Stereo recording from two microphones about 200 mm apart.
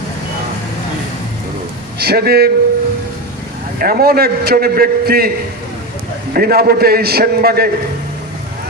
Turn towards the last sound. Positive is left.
turn(degrees=-50)  # may be behind; listen again after turning